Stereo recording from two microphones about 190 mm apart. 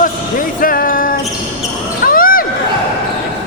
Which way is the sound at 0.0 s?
45° left (ahead or behind).